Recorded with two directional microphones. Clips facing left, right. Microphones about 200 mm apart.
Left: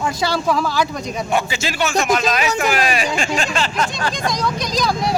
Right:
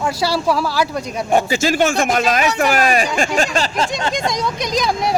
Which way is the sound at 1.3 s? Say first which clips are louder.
Right 7 dB; 45° right (ahead or behind).